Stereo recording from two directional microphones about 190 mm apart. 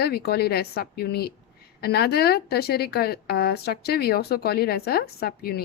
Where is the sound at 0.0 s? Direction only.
55° left (ahead or behind).